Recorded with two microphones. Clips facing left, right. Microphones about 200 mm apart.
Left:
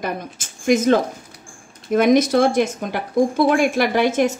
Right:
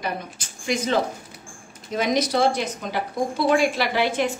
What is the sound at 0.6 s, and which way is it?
A woman's voice, 50° left (ahead or behind).